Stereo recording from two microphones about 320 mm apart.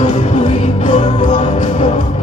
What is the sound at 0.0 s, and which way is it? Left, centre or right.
Music, centre.